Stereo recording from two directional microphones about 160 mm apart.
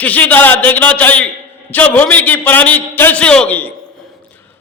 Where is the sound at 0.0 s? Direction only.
10° left (ahead or behind).